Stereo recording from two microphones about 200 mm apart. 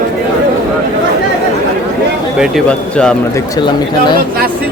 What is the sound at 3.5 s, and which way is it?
Speech, 20° left (ahead or behind).